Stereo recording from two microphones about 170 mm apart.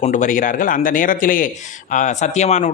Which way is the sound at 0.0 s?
50° left (ahead or behind).